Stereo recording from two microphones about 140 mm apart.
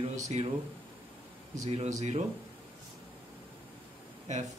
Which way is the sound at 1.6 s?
50° right (ahead or behind).